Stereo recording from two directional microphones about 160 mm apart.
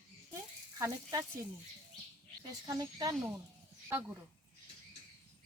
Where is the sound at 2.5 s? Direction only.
25° right (ahead or behind).